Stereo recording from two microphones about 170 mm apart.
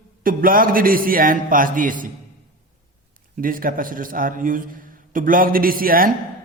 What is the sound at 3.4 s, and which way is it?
A man's voice, 55° right (ahead or behind).